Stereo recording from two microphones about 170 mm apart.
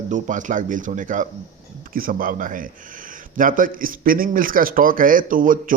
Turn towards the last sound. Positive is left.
turn(degrees=-55)  # may be behind; listen again after turning